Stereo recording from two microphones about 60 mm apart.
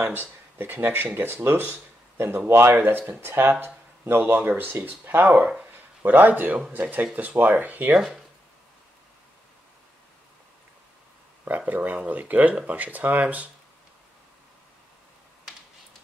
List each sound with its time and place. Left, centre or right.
0.0 s speech: right
11.4 s speech: right